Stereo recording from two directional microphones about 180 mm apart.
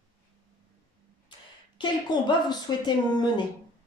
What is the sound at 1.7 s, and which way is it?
Speech, 25° left (ahead or behind).